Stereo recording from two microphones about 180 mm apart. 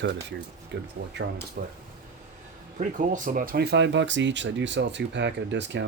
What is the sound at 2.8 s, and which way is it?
Speech, 45° right (ahead or behind).